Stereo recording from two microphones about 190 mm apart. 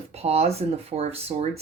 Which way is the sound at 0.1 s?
35° right (ahead or behind).